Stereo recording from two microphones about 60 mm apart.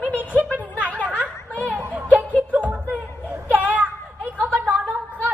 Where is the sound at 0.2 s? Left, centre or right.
Right.